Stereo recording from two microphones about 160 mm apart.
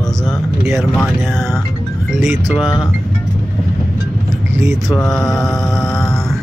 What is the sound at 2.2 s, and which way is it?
Speech, 15° right (ahead or behind).